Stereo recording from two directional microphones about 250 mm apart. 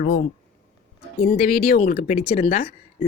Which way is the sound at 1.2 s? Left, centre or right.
Left.